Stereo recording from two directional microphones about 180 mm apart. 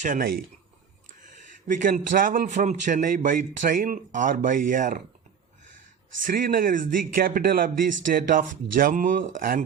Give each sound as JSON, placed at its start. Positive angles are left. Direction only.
{"t": 0.0, "sound": "a man's voice", "side_deg": -50}
{"t": 1.6, "sound": "a man's voice", "side_deg": -45}
{"t": 6.2, "sound": "a man's voice", "side_deg": -50}